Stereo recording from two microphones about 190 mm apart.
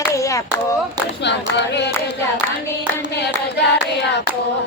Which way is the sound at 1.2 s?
65° left (ahead or behind).